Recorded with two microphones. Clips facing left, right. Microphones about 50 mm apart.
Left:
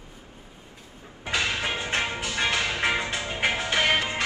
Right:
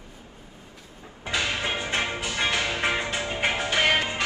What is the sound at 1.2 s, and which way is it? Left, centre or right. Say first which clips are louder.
Music: even; right.